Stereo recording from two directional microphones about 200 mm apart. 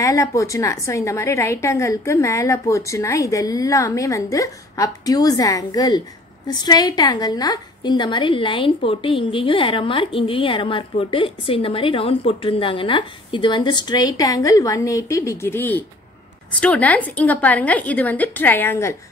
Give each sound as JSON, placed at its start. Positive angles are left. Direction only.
{"t": 0.0, "sound": "a woman's voice", "side_deg": 15}